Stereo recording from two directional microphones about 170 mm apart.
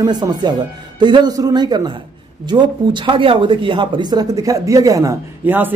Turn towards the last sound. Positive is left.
turn(degrees=-10)  # may be behind; listen again after turning